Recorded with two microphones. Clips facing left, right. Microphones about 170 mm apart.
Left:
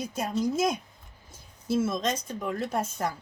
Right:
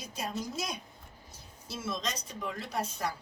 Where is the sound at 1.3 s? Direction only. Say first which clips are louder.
Left 16 dB; 50° left (ahead or behind).